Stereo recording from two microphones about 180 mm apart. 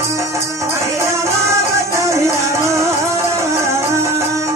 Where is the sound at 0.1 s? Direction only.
15° right (ahead or behind).